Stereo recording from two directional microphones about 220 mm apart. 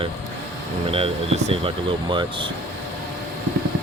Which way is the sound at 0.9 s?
25° right (ahead or behind).